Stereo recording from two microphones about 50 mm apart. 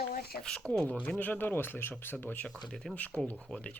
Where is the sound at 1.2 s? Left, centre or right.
Left.